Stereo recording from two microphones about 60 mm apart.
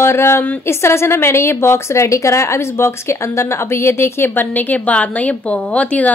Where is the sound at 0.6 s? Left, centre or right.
Left.